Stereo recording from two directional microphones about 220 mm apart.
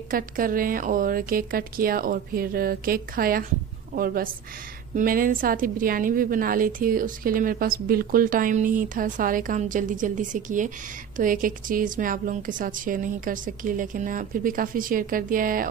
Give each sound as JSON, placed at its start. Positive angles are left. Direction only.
{"t": 0.1, "sound": "a woman's voice", "side_deg": -40}